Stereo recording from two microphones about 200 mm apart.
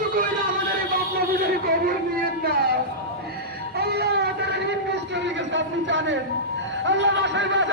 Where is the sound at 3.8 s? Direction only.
55° right (ahead or behind).